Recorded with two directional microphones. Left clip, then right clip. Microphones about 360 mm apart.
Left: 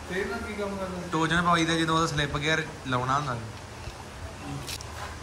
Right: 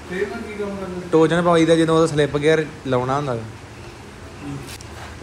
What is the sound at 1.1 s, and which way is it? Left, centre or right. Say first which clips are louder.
A man's voice: right 9 dB; centre.